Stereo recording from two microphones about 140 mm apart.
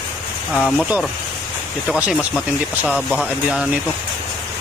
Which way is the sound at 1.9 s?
5° right (ahead or behind).